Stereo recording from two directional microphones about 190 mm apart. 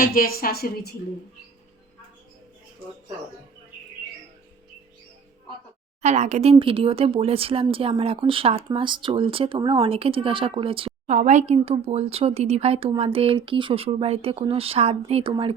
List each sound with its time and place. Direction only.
0.0 s a woman's voice: 50° left (ahead or behind)
6.0 s speech: 35° right (ahead or behind)